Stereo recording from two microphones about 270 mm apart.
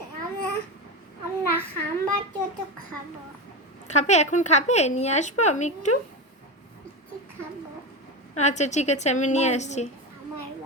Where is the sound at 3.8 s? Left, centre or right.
Left.